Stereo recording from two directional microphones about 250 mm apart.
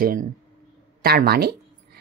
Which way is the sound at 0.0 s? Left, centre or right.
Right.